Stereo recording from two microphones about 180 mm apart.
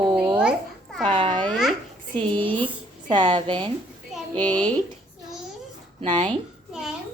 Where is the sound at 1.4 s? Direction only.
Centre (ahead or behind).